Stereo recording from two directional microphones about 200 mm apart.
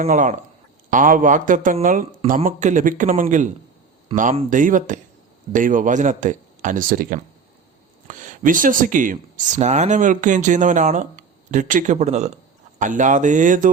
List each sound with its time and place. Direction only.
0.0 s speech: 40° right (ahead or behind)